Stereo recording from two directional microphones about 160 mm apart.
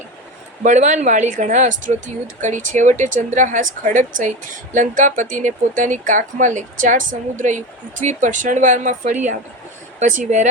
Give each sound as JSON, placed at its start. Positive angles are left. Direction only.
{"t": 0.6, "sound": "speech", "side_deg": -50}